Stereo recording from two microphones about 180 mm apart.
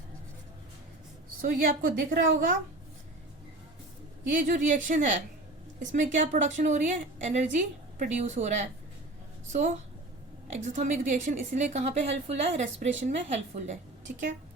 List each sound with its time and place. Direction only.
1.4 s a woman's voice: 50° right (ahead or behind)
4.4 s a woman's voice: 45° right (ahead or behind)